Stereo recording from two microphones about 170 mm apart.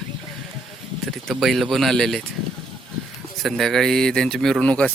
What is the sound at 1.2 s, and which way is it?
Speech, centre (ahead or behind).